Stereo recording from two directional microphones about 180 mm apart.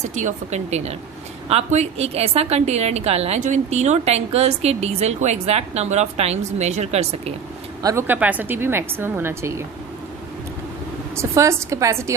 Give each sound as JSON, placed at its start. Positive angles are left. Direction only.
{"t": 0.1, "sound": "a woman's voice", "side_deg": -40}
{"t": 7.8, "sound": "speech", "side_deg": -15}
{"t": 11.1, "sound": "speech", "side_deg": -15}